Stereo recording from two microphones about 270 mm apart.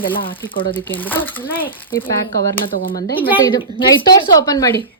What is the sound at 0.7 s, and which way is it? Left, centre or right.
Speech, centre.